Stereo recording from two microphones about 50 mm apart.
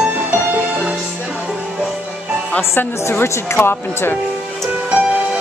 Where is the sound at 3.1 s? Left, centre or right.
Left.